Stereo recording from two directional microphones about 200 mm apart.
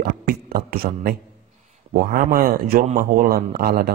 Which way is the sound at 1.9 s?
45° right (ahead or behind).